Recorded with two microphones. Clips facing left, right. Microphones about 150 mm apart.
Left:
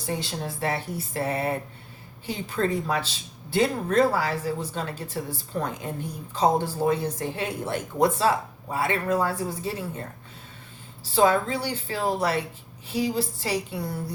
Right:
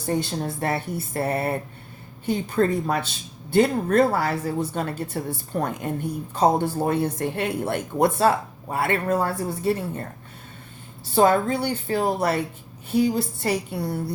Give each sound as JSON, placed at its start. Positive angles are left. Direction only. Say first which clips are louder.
{"t": 0.1, "sound": "a woman's voice", "louder": "right 6 dB", "side_deg": -50}
{"t": 11.1, "sound": "a woman's voice", "louder": "right 3 dB", "side_deg": -50}